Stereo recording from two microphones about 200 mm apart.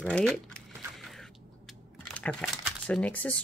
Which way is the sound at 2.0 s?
5° left (ahead or behind).